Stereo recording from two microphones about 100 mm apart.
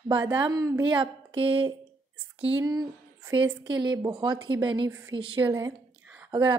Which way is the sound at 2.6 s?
40° right (ahead or behind).